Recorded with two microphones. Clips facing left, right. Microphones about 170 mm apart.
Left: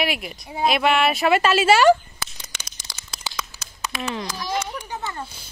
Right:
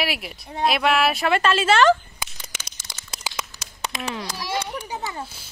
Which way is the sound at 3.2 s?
10° right (ahead or behind).